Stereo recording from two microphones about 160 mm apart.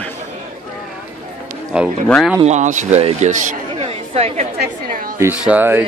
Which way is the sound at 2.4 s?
50° right (ahead or behind).